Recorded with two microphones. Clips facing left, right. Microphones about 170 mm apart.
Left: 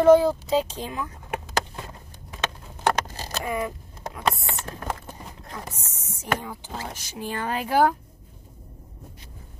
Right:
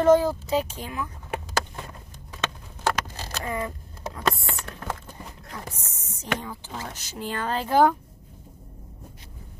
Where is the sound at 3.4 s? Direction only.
15° left (ahead or behind).